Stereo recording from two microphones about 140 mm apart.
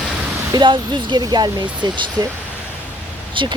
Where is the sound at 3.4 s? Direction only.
35° right (ahead or behind).